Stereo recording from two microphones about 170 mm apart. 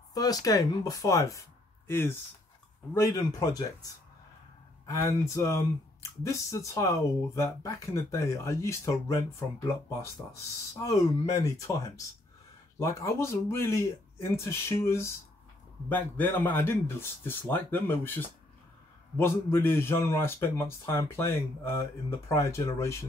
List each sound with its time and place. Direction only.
0.1 s speech: 20° left (ahead or behind)
10.8 s speech: 20° left (ahead or behind)
12.7 s speech: 20° left (ahead or behind)